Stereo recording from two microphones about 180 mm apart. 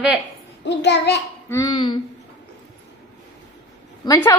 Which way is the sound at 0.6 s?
70° left (ahead or behind).